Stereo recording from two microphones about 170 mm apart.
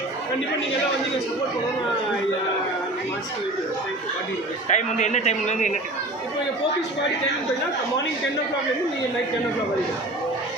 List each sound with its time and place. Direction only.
4.7 s a man's voice: 45° left (ahead or behind)